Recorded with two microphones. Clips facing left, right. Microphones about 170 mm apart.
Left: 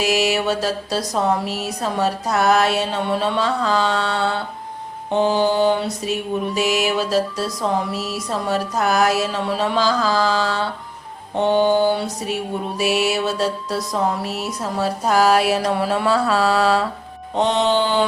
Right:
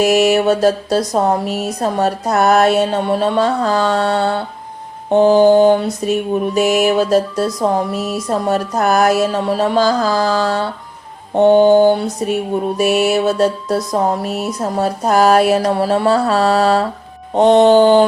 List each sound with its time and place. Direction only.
0.0 s mantra: 50° right (ahead or behind)